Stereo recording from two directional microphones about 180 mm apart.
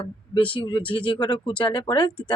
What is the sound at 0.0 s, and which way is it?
Speech, 30° left (ahead or behind).